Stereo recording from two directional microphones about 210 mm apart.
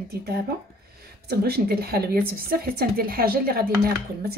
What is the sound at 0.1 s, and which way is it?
Speech, 50° right (ahead or behind).